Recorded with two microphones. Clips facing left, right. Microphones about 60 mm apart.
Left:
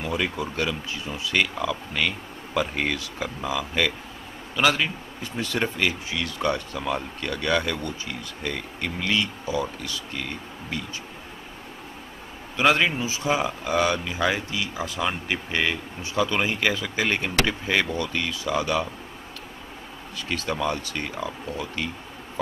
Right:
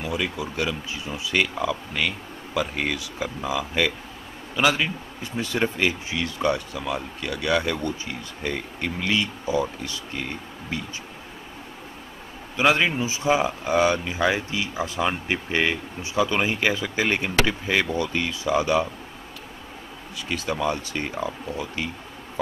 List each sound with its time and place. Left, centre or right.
0.0 s speech: centre
0.9 s speech: centre
3.4 s speech: centre
5.4 s speech: centre
6.8 s speech: centre
12.6 s speech: centre
13.0 s speech: right
17.5 s speech: centre
17.9 s speech: right
20.4 s speech: centre
20.7 s speech: centre